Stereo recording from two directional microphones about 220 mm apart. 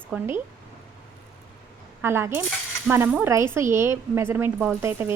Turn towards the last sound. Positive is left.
turn(degrees=-10)  # may be behind; listen again after turning